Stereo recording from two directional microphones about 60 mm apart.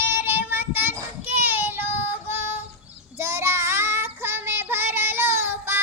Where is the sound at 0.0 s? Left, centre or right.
Right.